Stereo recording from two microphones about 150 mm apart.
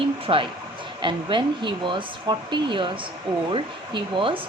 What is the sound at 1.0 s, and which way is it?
Speech, 30° right (ahead or behind).